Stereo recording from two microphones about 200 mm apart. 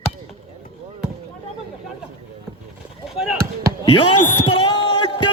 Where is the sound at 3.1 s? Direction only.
Centre (ahead or behind).